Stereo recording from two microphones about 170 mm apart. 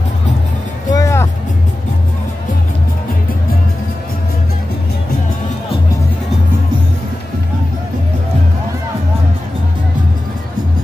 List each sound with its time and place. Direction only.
0.9 s music: 15° left (ahead or behind)